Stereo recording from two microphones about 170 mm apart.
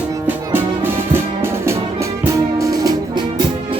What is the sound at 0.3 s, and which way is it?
Music, 10° right (ahead or behind).